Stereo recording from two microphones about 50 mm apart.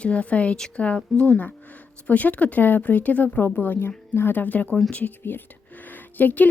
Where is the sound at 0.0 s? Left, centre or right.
Left.